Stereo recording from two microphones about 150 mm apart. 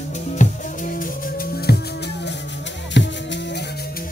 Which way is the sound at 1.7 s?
90° left.